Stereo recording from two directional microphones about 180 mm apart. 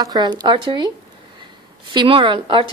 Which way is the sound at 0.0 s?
20° right (ahead or behind).